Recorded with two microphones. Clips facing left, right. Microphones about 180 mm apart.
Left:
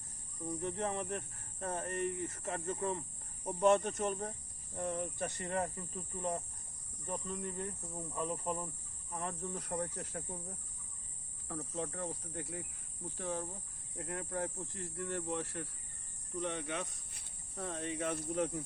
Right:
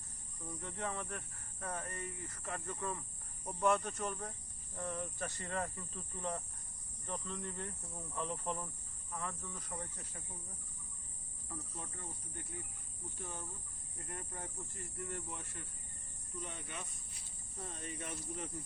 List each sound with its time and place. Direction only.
0.4 s speech: 20° left (ahead or behind)
9.1 s speech: 25° left (ahead or behind)
9.6 s speech: 65° left (ahead or behind)
10.0 s cricket: 50° left (ahead or behind)
11.4 s speech: 75° left (ahead or behind)